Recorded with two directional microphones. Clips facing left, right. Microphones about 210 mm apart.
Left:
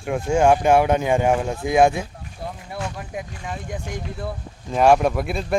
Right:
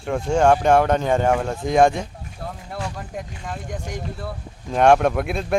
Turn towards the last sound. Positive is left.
turn(degrees=0)  # may be behind; listen again after turning